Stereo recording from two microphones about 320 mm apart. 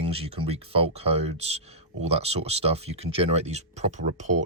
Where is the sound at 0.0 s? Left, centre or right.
Centre.